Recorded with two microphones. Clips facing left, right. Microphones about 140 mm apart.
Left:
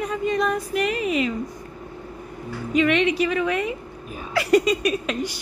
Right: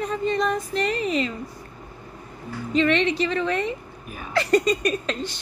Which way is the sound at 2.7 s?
10° left (ahead or behind).